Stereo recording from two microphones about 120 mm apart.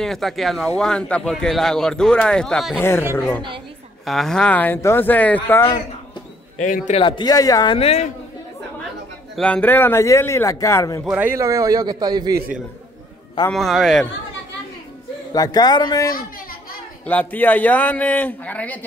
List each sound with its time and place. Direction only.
0.0 s speech: centre (ahead or behind)
2.8 s a man's voice: 20° left (ahead or behind)
4.0 s a man's voice: centre (ahead or behind)
6.6 s a man's voice: 90° left
7.0 s speech: 40° left (ahead or behind)
7.7 s a woman's voice: 55° left (ahead or behind)
9.4 s a man's voice: 10° left (ahead or behind); by 11.0 s 25° left (ahead or behind)
11.1 s speech: 15° right (ahead or behind)
11.3 s a man's voice: 25° right (ahead or behind)
13.5 s speech: centre (ahead or behind)
15.3 s speech: 30° left (ahead or behind)
17.0 s a man's voice: 15° left (ahead or behind)